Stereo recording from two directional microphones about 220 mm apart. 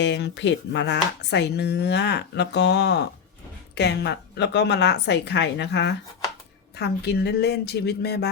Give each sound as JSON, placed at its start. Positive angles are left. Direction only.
{"t": 0.0, "sound": "speech", "side_deg": 50}